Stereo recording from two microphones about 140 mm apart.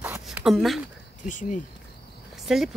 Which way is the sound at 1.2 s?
65° left (ahead or behind).